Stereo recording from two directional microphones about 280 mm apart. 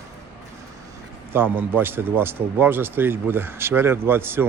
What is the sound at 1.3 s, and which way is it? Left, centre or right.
A man's voice, centre.